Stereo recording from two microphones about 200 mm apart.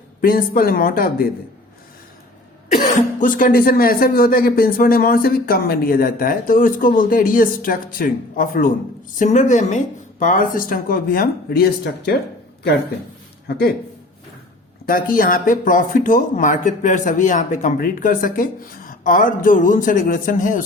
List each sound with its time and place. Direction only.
0.2 s speech: 45° left (ahead or behind)
2.7 s speech: 40° left (ahead or behind)
13.5 s speech: 50° left (ahead or behind)
14.8 s speech: 45° left (ahead or behind)